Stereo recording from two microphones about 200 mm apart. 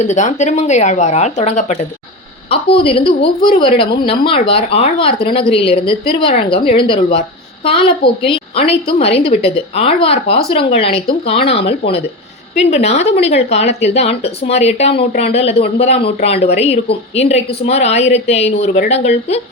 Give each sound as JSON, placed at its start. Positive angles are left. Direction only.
{"t": 0.0, "sound": "a woman's voice", "side_deg": 35}